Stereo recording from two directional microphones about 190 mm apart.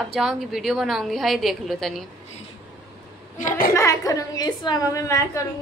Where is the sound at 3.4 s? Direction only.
45° left (ahead or behind).